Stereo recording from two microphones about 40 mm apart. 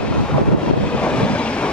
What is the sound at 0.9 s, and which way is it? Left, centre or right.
Vehicle, left.